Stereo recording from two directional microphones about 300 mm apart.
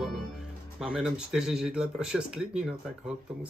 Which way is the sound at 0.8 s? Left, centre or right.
Centre.